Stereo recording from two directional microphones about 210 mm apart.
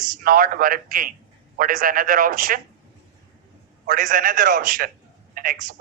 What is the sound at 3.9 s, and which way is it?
A man's voice, 40° right (ahead or behind).